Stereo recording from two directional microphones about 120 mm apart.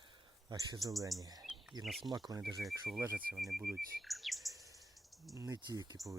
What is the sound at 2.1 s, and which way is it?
Speech, 30° right (ahead or behind).